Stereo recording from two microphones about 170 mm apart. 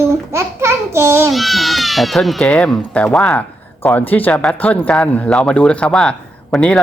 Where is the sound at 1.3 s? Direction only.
Centre (ahead or behind).